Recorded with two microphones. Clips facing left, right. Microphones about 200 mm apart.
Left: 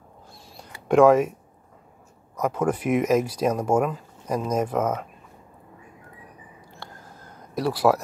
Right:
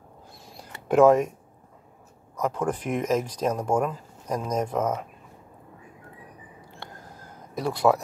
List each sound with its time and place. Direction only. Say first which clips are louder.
0.8 s speech: left 1 dB; centre (ahead or behind)
2.4 s speech: left 3 dB; 10° left (ahead or behind)
6.8 s a sound: even; 20° right (ahead or behind)
7.5 s speech: left 1 dB; 5° left (ahead or behind)